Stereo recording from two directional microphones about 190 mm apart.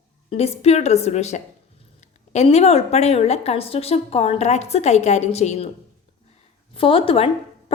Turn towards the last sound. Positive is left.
turn(degrees=30)  # may be behind; listen again after turning